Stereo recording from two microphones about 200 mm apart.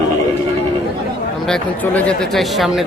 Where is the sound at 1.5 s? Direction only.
5° left (ahead or behind).